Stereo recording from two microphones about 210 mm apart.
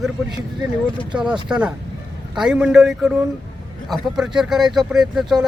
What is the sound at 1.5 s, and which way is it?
Speech, 5° right (ahead or behind).